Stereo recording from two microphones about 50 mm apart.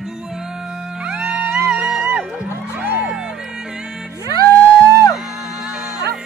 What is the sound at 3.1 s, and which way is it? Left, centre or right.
Music, centre.